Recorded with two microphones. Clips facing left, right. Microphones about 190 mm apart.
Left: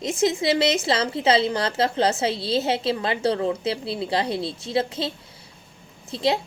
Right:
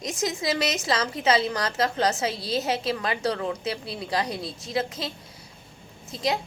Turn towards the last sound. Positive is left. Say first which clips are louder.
# left 4 dB
turn(degrees=30)  # may be behind; listen again after turning